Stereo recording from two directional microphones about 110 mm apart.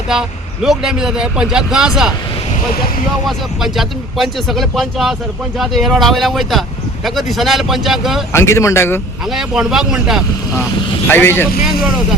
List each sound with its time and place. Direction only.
0.1 s speech: 5° right (ahead or behind)
3.2 s speech: centre (ahead or behind)
8.3 s speech: 25° left (ahead or behind)
9.3 s speech: 5° right (ahead or behind)
11.1 s speech: 20° left (ahead or behind)